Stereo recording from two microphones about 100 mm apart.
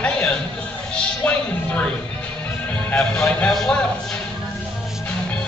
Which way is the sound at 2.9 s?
20° left (ahead or behind).